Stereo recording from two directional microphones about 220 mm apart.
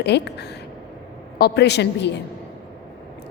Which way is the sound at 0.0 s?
50° left (ahead or behind).